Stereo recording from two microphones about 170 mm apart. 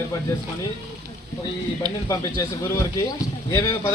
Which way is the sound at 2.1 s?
20° left (ahead or behind).